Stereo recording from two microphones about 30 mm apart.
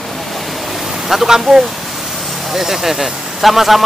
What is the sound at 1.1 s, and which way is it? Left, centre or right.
Speech, centre.